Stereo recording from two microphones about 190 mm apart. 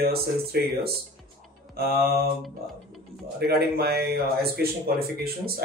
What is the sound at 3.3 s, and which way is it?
Speech, 55° right (ahead or behind).